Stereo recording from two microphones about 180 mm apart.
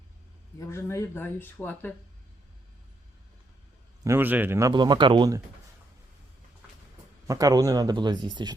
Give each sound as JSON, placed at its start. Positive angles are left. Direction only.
{"t": 0.6, "sound": "speech", "side_deg": 15}
{"t": 4.0, "sound": "speech", "side_deg": -15}
{"t": 7.3, "sound": "speech", "side_deg": -20}